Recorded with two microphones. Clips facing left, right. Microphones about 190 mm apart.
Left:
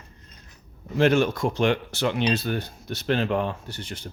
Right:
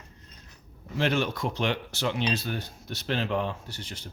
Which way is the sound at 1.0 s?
45° left (ahead or behind).